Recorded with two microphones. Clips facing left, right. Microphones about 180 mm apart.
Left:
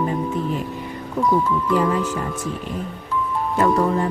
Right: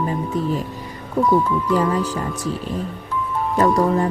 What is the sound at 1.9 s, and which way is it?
Speech, 35° right (ahead or behind).